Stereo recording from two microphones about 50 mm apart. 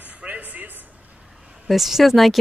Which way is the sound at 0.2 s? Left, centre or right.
Right.